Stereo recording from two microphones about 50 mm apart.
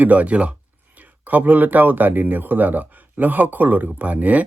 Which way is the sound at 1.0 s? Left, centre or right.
Right.